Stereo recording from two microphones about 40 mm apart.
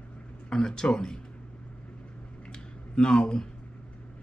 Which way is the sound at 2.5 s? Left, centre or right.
Left.